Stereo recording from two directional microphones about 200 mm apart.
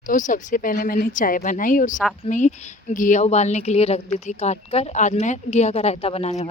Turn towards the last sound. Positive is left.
turn(degrees=35)  # may be behind; listen again after turning